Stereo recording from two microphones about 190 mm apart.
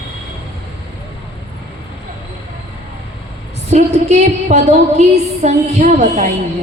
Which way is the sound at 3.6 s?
35° right (ahead or behind).